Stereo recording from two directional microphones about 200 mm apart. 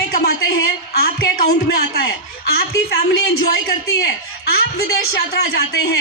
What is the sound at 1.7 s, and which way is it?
A woman's voice, 50° left (ahead or behind).